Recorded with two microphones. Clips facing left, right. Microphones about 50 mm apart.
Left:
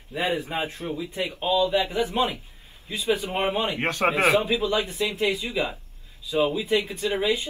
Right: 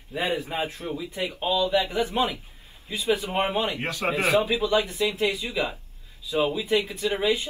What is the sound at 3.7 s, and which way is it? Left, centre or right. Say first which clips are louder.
Speech: left 3 dB; left.